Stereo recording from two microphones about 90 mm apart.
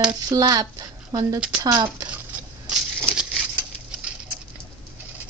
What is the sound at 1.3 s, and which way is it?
Speech, 10° right (ahead or behind).